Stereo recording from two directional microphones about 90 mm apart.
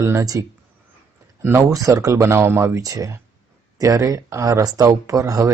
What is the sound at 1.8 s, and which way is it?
Speech, 40° right (ahead or behind).